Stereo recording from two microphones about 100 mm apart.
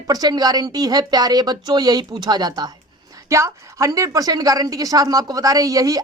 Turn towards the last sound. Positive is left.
turn(degrees=-35)  # may be behind; listen again after turning